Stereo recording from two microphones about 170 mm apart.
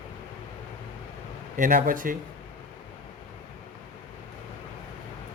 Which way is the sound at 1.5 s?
55° right (ahead or behind).